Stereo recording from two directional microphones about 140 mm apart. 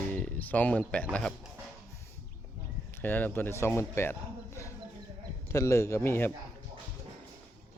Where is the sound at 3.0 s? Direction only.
10° left (ahead or behind).